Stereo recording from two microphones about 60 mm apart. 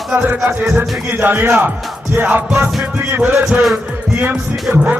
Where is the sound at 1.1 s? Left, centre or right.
Right.